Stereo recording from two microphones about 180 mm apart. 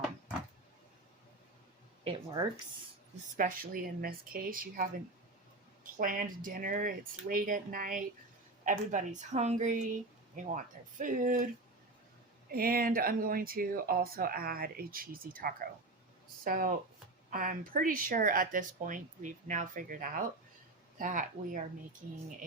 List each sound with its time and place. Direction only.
2.0 s speech: 20° right (ahead or behind)
3.3 s speech: 50° right (ahead or behind)
12.5 s speech: 55° right (ahead or behind)